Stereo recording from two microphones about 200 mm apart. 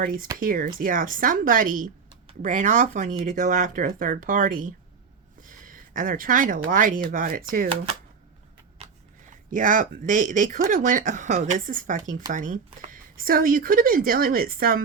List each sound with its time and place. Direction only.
0.0 s speech: 45° right (ahead or behind)
8.8 s speech: 40° right (ahead or behind)